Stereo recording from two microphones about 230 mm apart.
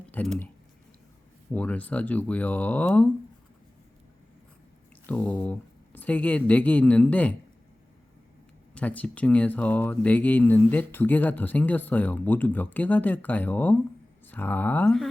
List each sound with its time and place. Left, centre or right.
0.1 s speech: centre
1.5 s speech: centre
5.0 s speech: centre
8.7 s speech: centre